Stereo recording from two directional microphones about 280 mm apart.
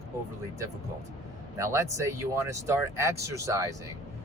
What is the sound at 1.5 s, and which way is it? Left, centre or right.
Speech, centre.